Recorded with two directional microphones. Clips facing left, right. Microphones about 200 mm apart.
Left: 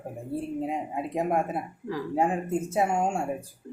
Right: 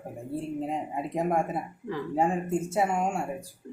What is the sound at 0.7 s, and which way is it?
Speech, 5° left (ahead or behind).